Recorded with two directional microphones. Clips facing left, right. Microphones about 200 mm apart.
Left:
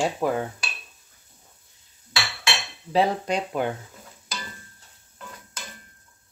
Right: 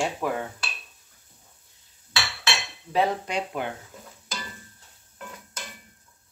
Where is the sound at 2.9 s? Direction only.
40° left (ahead or behind).